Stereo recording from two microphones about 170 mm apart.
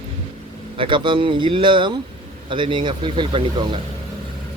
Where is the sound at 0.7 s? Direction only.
30° right (ahead or behind).